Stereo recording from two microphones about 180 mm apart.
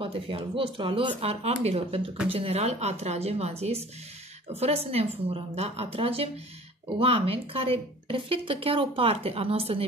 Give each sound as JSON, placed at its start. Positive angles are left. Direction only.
{"t": 0.0, "sound": "a woman's voice", "side_deg": -30}